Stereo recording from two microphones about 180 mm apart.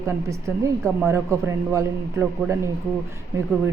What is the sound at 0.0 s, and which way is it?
Speech, 15° right (ahead or behind).